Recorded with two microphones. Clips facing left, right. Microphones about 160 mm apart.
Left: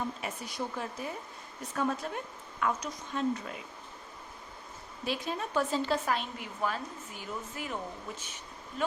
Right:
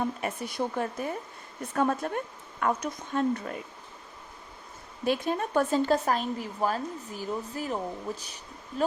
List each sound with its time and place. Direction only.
0.0 s a woman's voice: 55° right (ahead or behind)
5.0 s speech: 50° right (ahead or behind); by 8.4 s 35° right (ahead or behind)